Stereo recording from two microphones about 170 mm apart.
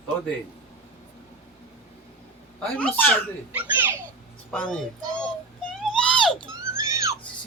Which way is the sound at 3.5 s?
10° right (ahead or behind).